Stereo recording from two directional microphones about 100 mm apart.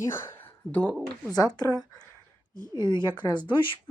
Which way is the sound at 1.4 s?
40° left (ahead or behind).